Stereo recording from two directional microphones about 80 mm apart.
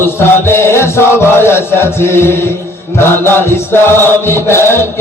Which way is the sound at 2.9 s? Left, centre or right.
Left.